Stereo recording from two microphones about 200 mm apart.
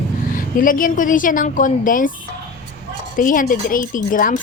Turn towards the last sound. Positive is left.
turn(degrees=45)  # may be behind; listen again after turning